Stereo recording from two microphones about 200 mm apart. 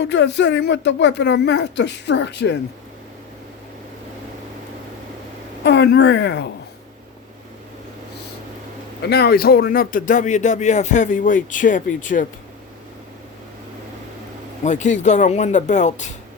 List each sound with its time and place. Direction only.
0.0 s speech: 60° left (ahead or behind)
5.6 s speech: 60° left (ahead or behind)
9.0 s speech: 55° left (ahead or behind)
14.6 s speech: 35° left (ahead or behind)